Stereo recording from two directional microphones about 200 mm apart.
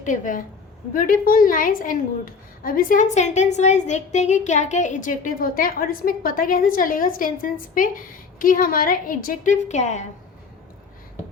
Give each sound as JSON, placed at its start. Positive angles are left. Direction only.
{"t": 0.0, "sound": "a woman's voice", "side_deg": 40}